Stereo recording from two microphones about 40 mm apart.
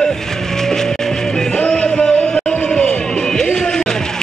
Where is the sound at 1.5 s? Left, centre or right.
Left.